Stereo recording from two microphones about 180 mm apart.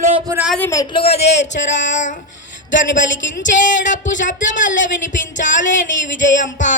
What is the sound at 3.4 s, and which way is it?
Speech, 45° left (ahead or behind).